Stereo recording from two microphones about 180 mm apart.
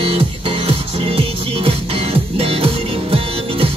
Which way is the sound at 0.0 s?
30° right (ahead or behind).